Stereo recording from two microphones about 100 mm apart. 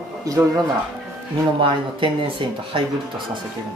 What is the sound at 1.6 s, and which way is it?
Speech, 60° right (ahead or behind).